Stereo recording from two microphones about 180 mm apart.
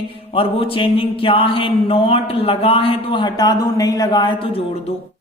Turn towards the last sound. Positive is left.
turn(degrees=25)  # may be behind; listen again after turning